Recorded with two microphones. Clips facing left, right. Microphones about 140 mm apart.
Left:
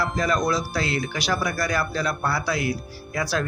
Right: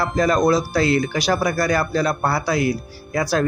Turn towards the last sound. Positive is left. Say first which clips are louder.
# right 5 dB
turn(degrees=-40)  # may be behind; listen again after turning